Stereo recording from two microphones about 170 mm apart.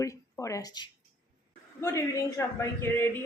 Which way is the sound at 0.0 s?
20° left (ahead or behind).